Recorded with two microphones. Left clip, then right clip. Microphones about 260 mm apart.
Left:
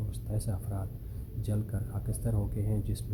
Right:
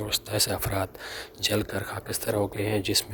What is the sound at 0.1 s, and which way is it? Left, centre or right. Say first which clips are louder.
Speech: right 19 dB; right.